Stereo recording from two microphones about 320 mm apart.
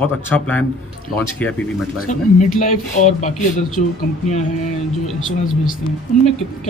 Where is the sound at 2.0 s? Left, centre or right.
Left.